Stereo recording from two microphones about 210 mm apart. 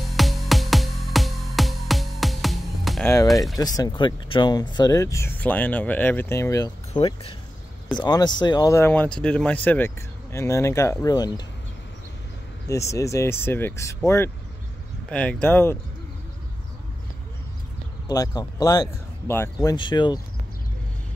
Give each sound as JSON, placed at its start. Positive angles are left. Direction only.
{"t": 0.1, "sound": "music", "side_deg": 0}
{"t": 3.3, "sound": "speech", "side_deg": 0}
{"t": 3.5, "sound": "speech", "side_deg": 20}
{"t": 6.9, "sound": "speech", "side_deg": 25}
{"t": 12.6, "sound": "speech", "side_deg": 15}
{"t": 18.0, "sound": "speech", "side_deg": 15}